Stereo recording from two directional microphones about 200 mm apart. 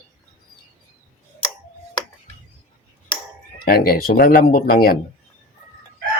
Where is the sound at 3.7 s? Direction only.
50° left (ahead or behind).